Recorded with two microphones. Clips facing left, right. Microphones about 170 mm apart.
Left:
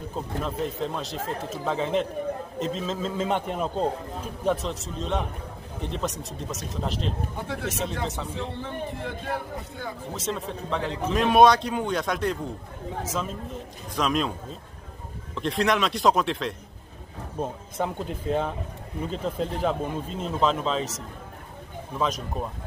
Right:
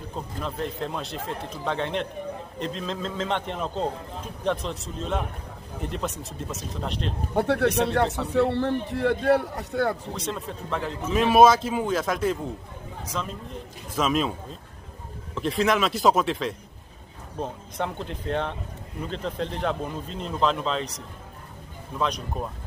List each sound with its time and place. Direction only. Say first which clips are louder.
0.4 s a man's voice: left 1 dB; centre (ahead or behind)
7.3 s a man's voice: right 9 dB; 65° right (ahead or behind)
10.1 s a man's voice: left 1 dB; centre (ahead or behind)
15.3 s a man's voice: right 1 dB; centre (ahead or behind)
21.9 s a man's voice: even; centre (ahead or behind)